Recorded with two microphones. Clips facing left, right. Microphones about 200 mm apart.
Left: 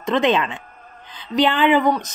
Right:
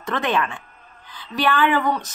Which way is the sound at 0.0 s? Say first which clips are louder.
Left 5 dB; 20° left (ahead or behind).